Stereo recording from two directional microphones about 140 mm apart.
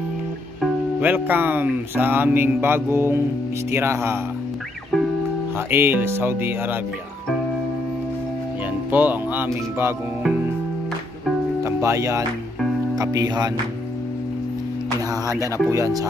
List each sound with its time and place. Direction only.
1.0 s speech: 10° right (ahead or behind)
5.7 s speech: 15° right (ahead or behind)
8.9 s speech: 15° right (ahead or behind)
11.6 s speech: 20° right (ahead or behind)
15.0 s speech: 20° left (ahead or behind)
15.5 s speech: 20° right (ahead or behind)